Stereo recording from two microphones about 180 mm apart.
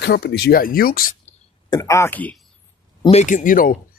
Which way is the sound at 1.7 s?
15° left (ahead or behind).